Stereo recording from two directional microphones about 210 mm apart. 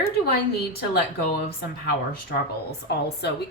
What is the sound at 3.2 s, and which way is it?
Speech, 50° left (ahead or behind).